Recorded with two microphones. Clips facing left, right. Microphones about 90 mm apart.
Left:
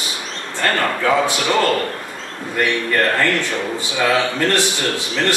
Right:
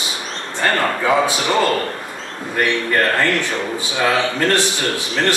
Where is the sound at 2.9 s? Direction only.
20° right (ahead or behind).